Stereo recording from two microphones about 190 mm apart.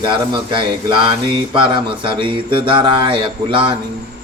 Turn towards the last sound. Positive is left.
turn(degrees=-25)  # may be behind; listen again after turning